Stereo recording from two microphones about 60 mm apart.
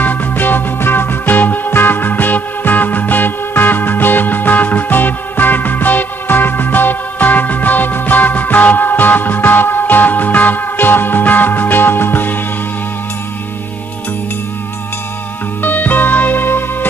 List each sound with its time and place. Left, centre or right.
0.0 s music: left
15.6 s music: left